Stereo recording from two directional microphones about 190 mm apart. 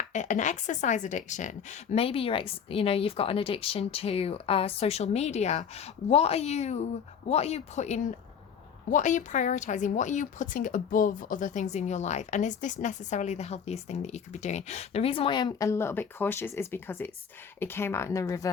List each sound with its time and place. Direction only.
0.1 s speech: 40° left (ahead or behind); by 18.4 s 15° left (ahead or behind)